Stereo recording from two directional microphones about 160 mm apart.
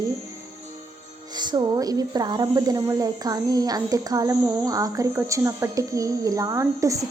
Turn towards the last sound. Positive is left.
turn(degrees=-20)  # may be behind; listen again after turning